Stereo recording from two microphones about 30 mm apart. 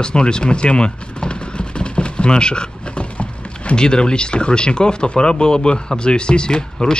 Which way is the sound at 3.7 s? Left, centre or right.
Left.